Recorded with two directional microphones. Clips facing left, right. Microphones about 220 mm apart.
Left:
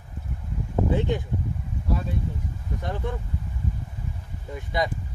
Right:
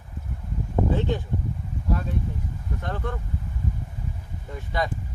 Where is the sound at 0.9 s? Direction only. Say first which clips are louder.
Left 1 dB; 15° left (ahead or behind).